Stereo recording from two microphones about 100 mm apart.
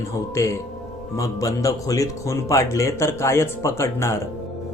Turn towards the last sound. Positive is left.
turn(degrees=30)  # may be behind; listen again after turning